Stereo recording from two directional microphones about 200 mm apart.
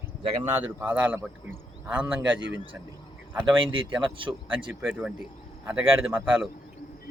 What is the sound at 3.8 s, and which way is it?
Speech, 25° right (ahead or behind).